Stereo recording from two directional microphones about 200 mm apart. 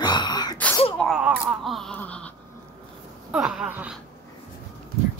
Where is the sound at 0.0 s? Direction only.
20° left (ahead or behind).